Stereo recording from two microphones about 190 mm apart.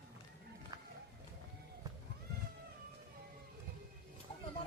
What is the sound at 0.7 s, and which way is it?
Run, 20° right (ahead or behind).